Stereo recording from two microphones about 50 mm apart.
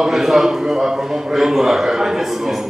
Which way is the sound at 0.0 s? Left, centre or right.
Centre.